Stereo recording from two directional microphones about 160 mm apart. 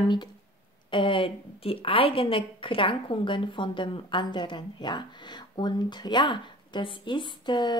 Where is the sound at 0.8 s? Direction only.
30° left (ahead or behind).